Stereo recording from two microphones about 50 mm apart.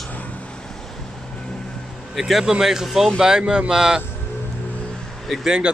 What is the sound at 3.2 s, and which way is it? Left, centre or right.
Speech, centre.